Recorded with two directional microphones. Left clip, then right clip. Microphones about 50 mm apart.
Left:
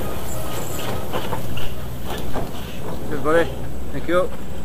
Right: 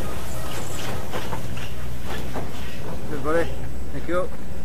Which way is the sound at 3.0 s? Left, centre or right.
Centre.